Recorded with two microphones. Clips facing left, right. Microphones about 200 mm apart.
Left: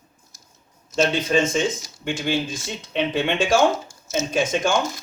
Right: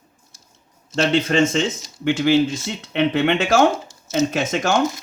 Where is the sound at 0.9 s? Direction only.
70° right (ahead or behind).